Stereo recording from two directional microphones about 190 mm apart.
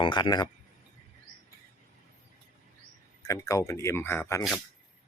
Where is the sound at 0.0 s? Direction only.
25° left (ahead or behind).